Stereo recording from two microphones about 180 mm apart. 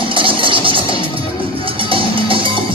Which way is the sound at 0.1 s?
30° right (ahead or behind).